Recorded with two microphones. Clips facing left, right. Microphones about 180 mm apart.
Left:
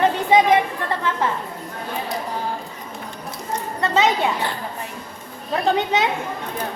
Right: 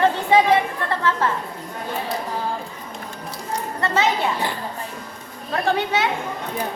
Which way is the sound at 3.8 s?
20° left (ahead or behind).